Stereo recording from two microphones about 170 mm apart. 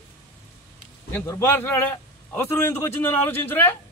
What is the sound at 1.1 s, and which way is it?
A man's voice, 15° left (ahead or behind).